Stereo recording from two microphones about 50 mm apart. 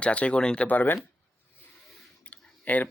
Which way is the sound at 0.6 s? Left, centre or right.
Left.